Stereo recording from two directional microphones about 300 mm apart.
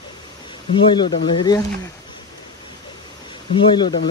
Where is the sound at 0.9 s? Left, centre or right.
Centre.